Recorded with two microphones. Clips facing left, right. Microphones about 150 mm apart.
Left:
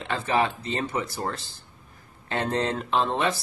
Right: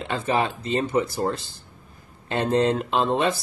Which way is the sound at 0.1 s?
20° right (ahead or behind).